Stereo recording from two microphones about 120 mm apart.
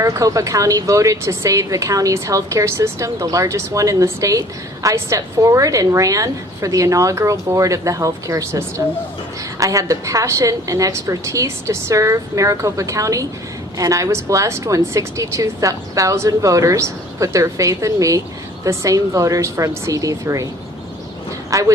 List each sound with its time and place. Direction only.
0.0 s speech: 25° right (ahead or behind)
21.5 s speech: 25° right (ahead or behind)